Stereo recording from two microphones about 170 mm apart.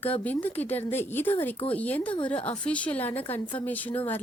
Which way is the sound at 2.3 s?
35° left (ahead or behind).